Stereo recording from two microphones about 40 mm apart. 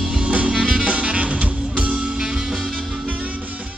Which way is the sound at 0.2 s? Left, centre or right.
Right.